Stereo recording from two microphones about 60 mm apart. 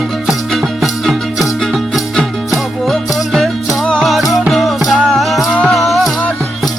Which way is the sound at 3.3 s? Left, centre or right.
Centre.